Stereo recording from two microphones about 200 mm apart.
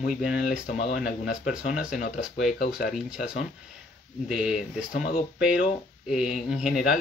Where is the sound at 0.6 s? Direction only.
40° left (ahead or behind).